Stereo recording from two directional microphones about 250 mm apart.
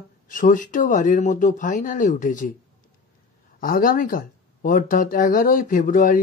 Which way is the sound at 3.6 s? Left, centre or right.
Left.